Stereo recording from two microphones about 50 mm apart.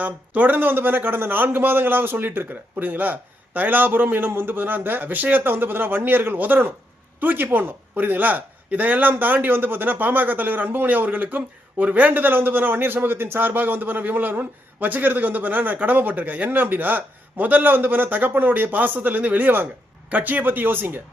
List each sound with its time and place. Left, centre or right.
0.0 s a man's voice: right